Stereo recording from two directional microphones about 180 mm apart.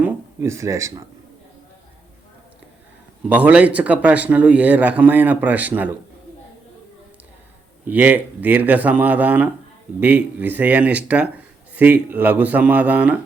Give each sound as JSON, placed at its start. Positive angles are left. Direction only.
{"t": 0.0, "sound": "speech", "side_deg": -10}
{"t": 3.2, "sound": "speech", "side_deg": -10}
{"t": 7.9, "sound": "speech", "side_deg": -10}